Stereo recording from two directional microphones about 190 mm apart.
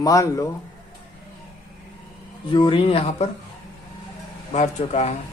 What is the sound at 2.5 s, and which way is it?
Speech, 25° left (ahead or behind).